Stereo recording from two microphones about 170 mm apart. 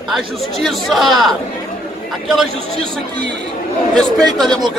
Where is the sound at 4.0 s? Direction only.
Centre (ahead or behind).